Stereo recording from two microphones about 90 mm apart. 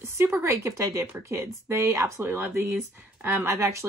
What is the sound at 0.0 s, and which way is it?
Speech, 30° right (ahead or behind).